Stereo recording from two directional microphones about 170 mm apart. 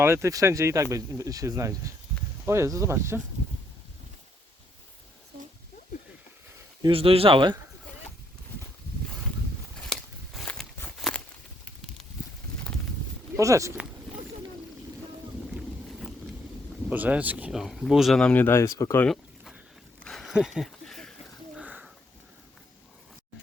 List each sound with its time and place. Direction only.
0.0 s speech: 15° right (ahead or behind)
6.8 s speech: 35° right (ahead or behind)
9.8 s a sound: centre (ahead or behind)
13.3 s speech: 20° right (ahead or behind)
15.5 s boat: centre (ahead or behind)
16.9 s speech: 10° right (ahead or behind); by 19.0 s 15° left (ahead or behind)
19.0 s a sound: centre (ahead or behind)